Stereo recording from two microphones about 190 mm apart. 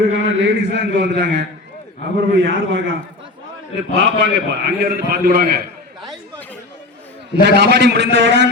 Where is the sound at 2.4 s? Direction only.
80° right.